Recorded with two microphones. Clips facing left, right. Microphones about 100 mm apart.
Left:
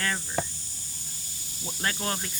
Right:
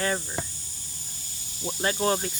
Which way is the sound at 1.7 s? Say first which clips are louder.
Right 6 dB; 20° right (ahead or behind).